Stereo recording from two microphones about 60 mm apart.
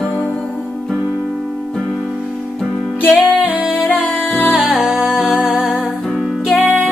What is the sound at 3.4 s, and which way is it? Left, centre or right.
Music, right.